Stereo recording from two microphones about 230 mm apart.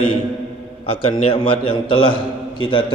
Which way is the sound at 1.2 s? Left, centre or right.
Left.